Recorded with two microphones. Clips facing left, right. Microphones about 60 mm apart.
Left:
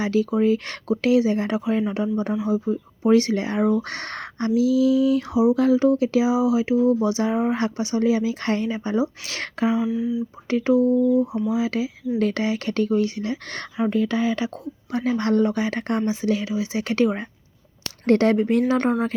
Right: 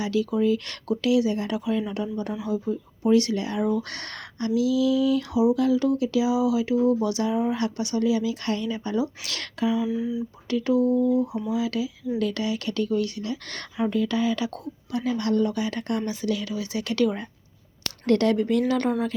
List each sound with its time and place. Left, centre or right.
0.0 s speech: left
5.2 s speech: left
9.9 s speech: centre
10.5 s speech: left